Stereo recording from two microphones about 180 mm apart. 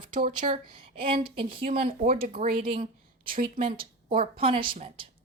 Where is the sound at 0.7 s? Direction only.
30° right (ahead or behind).